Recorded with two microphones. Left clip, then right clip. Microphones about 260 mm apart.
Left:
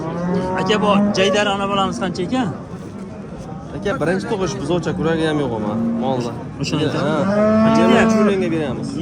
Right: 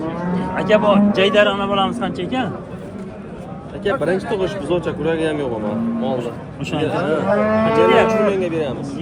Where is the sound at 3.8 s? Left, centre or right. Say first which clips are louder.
Right 1 dB; left.